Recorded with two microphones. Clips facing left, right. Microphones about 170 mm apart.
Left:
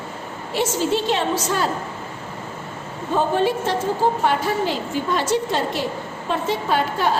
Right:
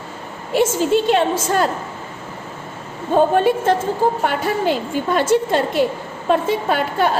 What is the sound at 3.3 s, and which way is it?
Speech, 55° right (ahead or behind).